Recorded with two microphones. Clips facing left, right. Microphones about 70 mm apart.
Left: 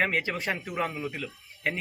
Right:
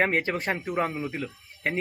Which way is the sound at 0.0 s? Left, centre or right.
Right.